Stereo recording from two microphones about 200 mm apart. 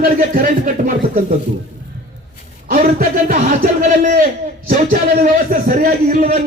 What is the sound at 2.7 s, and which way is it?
Speech, 45° right (ahead or behind).